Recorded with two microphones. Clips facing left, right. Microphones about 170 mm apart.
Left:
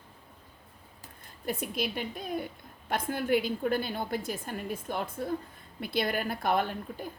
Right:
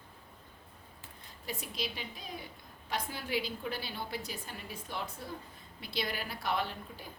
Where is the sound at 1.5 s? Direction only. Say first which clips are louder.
Left 7 dB; 55° left (ahead or behind).